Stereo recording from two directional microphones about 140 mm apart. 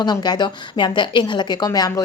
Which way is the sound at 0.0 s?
30° left (ahead or behind).